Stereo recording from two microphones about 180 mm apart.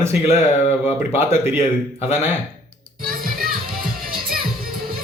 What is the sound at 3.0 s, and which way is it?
Music, 50° right (ahead or behind).